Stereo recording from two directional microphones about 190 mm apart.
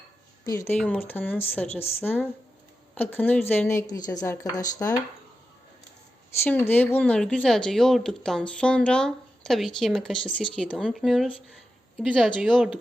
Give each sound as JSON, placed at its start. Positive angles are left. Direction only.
{"t": 0.4, "sound": "a woman's voice", "side_deg": 15}
{"t": 6.4, "sound": "speech", "side_deg": 10}